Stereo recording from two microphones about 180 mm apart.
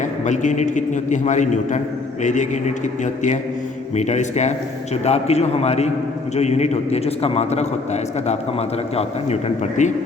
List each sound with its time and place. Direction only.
0.0 s a man's voice: 45° left (ahead or behind)